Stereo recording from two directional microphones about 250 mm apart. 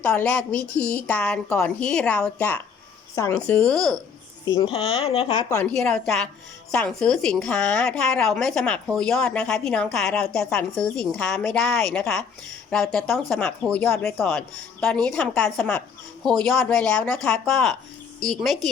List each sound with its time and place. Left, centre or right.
0.1 s a woman's voice: centre
4.4 s a woman's voice: centre
5.5 s a woman's voice: centre